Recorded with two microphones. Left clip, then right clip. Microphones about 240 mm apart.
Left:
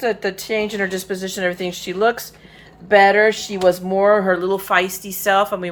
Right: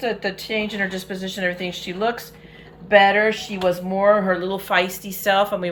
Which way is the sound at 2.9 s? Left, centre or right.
Left.